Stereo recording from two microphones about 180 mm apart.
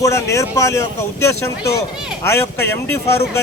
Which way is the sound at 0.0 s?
15° left (ahead or behind).